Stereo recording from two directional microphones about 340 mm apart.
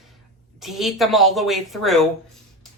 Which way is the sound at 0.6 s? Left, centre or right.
Centre.